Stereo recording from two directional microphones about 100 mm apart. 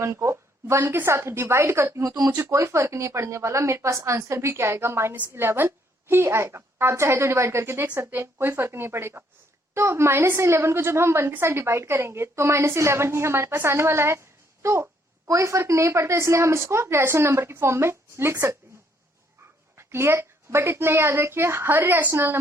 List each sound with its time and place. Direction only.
0.0 s speech: 30° right (ahead or behind)
19.7 s speech: 25° right (ahead or behind)